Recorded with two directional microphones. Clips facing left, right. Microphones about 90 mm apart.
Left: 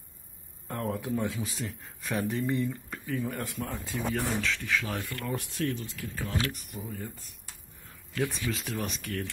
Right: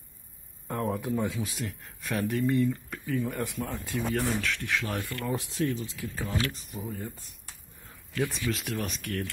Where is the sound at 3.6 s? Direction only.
15° left (ahead or behind).